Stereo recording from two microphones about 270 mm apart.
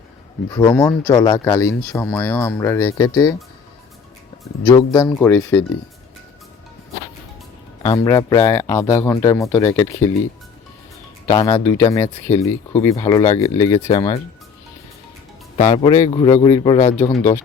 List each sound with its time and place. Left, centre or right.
0.5 s speech: centre
4.6 s speech: centre
7.8 s speech: centre
11.3 s speech: centre
15.5 s speech: centre